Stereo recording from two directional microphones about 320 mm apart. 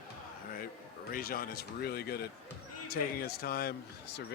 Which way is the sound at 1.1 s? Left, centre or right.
Left.